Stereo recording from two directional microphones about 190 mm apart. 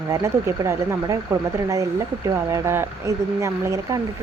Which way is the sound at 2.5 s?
15° right (ahead or behind).